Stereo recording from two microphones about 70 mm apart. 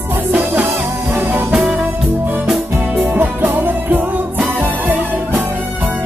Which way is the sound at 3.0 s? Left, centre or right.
Right.